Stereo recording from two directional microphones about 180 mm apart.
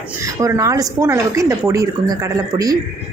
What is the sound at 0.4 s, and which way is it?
Speech, 20° right (ahead or behind).